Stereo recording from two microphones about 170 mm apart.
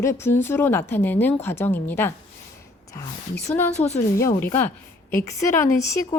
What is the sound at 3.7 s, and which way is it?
Speech, 40° left (ahead or behind).